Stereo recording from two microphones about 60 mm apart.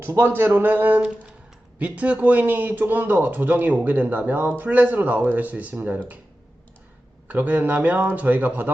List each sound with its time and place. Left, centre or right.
0.0 s a man's voice: right
7.3 s speech: right